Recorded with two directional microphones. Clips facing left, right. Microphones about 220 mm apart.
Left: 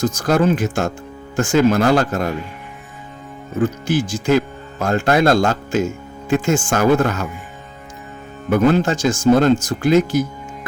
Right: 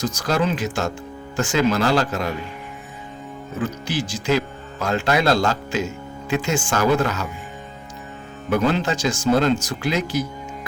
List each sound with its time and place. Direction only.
0.0 s speech: 50° left (ahead or behind)
3.6 s speech: 50° left (ahead or behind)
8.4 s speech: 50° left (ahead or behind)